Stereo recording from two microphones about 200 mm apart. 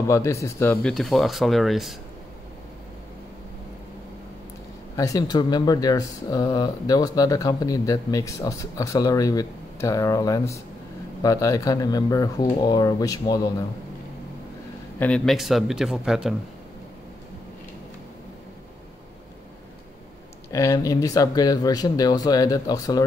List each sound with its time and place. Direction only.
0.1 s speech: 15° left (ahead or behind); by 2.0 s centre (ahead or behind)
4.9 s speech: 15° left (ahead or behind)
15.0 s speech: 5° left (ahead or behind)
20.5 s speech: 15° left (ahead or behind)